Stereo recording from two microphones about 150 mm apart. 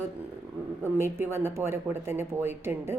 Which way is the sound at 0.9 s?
15° right (ahead or behind).